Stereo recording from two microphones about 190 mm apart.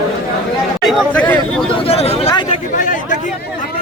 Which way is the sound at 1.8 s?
30° left (ahead or behind).